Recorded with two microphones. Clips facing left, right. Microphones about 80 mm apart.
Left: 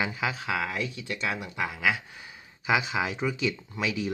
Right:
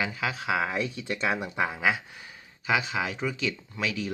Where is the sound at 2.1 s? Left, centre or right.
Centre.